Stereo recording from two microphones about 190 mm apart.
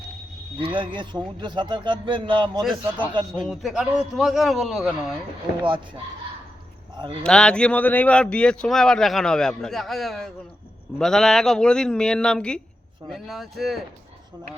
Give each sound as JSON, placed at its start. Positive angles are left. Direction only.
{"t": 0.6, "sound": "a man's voice", "side_deg": -25}
{"t": 3.4, "sound": "speech", "side_deg": 0}
{"t": 5.6, "sound": "a man's voice", "side_deg": -25}
{"t": 7.2, "sound": "speech", "side_deg": 5}